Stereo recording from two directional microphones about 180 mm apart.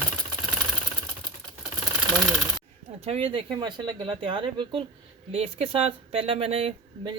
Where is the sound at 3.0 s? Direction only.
30° right (ahead or behind).